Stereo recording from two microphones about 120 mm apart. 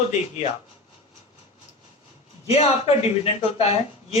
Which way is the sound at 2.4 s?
55° left (ahead or behind).